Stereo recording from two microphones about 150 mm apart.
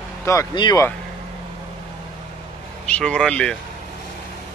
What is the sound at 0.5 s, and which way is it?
Speech, 30° left (ahead or behind).